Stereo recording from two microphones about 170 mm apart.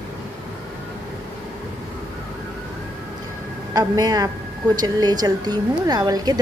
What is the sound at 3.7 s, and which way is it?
A woman's voice, 20° right (ahead or behind).